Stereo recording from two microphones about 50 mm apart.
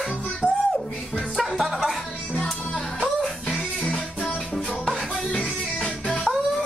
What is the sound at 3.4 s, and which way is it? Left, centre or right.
Music, left.